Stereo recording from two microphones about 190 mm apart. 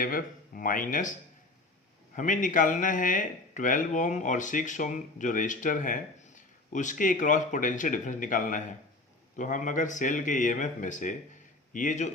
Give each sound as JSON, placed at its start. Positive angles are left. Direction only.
{"t": 0.0, "sound": "speech", "side_deg": 50}
{"t": 2.1, "sound": "speech", "side_deg": 40}